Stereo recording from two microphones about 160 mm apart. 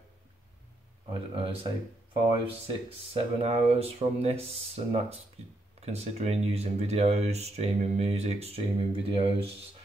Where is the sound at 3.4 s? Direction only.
40° right (ahead or behind).